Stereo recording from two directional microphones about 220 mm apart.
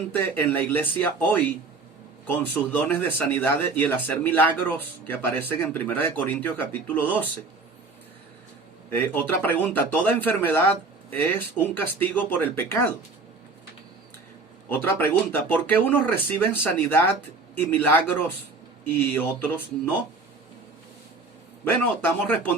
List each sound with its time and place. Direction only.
0.1 s speech: 10° left (ahead or behind)
8.9 s speech: 10° left (ahead or behind)
14.7 s speech: 10° left (ahead or behind)
21.6 s speech: 10° left (ahead or behind)